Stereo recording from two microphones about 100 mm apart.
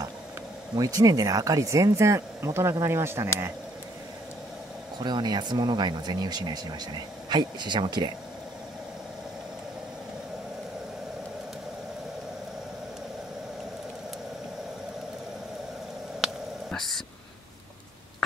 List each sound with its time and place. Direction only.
0.7 s speech: 40° right (ahead or behind)
4.9 s speech: 45° right (ahead or behind)
16.7 s a sound: 5° left (ahead or behind)